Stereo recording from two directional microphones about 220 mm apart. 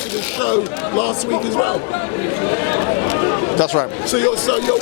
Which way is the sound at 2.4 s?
20° left (ahead or behind).